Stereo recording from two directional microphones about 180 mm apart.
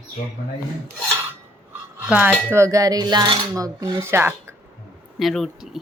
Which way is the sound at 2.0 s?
10° right (ahead or behind).